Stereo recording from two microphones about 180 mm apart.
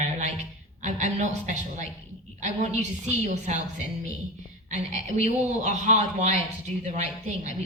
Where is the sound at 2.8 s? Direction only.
40° right (ahead or behind).